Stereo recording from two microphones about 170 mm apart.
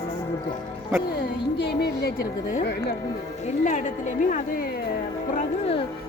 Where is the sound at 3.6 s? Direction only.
45° left (ahead or behind).